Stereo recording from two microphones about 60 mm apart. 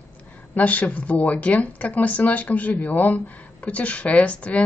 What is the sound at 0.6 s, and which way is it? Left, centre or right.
Speech, left.